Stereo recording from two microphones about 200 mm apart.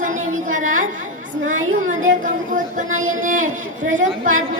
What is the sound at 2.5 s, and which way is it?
Speech, 40° right (ahead or behind).